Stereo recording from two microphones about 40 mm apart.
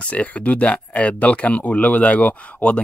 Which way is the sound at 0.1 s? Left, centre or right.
Left.